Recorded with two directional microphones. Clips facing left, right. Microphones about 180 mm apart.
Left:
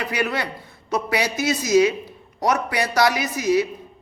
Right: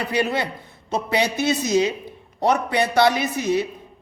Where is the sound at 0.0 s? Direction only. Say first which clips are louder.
Right 2 dB; 25° right (ahead or behind).